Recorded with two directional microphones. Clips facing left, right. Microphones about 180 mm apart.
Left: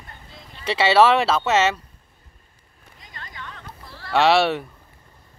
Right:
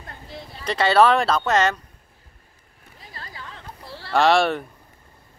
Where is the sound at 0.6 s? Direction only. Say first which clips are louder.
Left 1 dB; 5° left (ahead or behind).